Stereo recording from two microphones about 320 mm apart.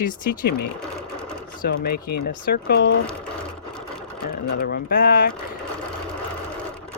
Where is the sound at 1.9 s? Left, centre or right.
Left.